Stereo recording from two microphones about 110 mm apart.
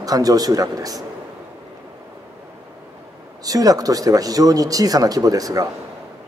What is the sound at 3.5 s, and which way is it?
A man's voice, 35° right (ahead or behind).